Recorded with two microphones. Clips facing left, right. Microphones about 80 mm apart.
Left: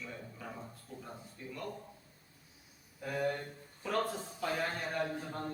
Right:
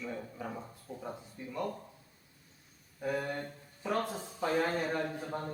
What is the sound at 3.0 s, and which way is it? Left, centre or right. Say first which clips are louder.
Speech: right 1 dB; centre.